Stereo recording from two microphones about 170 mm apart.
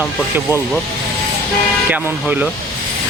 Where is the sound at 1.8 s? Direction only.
10° right (ahead or behind).